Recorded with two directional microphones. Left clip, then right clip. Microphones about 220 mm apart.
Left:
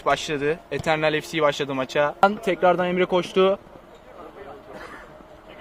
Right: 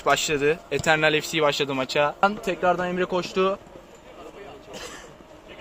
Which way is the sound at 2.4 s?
35° left (ahead or behind).